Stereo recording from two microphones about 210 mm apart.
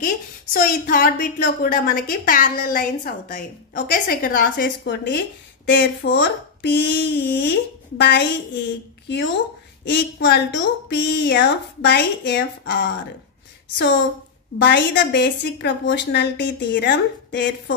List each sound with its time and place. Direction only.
0.0 s a woman's voice: 40° left (ahead or behind)
9.8 s a woman's voice: 55° left (ahead or behind)
14.6 s a woman's voice: 55° left (ahead or behind)